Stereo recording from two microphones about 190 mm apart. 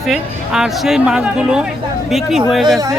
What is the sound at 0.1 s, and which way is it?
Speech, centre (ahead or behind).